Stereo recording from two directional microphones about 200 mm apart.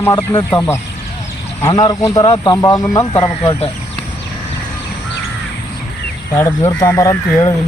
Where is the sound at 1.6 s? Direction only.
20° left (ahead or behind).